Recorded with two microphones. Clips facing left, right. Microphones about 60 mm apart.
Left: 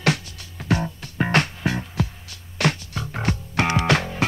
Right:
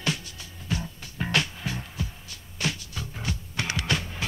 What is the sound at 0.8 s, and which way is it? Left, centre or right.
Music, left.